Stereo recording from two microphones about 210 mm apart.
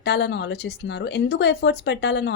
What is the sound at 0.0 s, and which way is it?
Speech, 55° left (ahead or behind).